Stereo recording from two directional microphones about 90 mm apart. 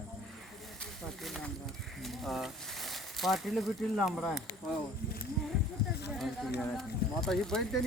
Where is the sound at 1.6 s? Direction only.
Centre (ahead or behind).